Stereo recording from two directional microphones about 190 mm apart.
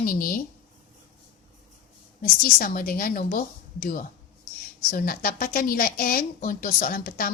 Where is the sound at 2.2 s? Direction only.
50° left (ahead or behind).